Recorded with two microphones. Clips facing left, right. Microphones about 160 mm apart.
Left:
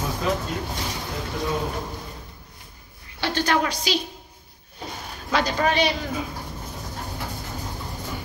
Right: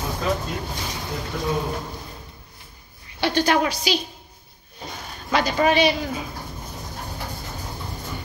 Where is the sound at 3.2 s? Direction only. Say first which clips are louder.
Right 3 dB; 15° right (ahead or behind).